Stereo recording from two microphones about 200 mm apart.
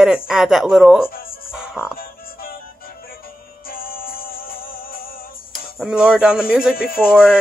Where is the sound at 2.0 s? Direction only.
45° left (ahead or behind).